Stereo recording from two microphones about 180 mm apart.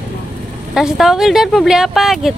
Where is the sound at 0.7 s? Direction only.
Centre (ahead or behind).